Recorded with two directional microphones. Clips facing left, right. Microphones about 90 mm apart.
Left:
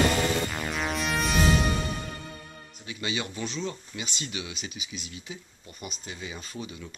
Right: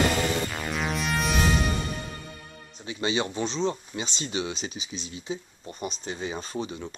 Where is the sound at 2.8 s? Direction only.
30° right (ahead or behind).